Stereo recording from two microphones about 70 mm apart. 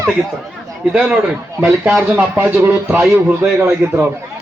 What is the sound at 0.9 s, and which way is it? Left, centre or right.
A man's voice, centre.